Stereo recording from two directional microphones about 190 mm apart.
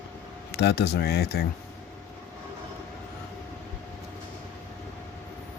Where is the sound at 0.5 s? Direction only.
60° left (ahead or behind).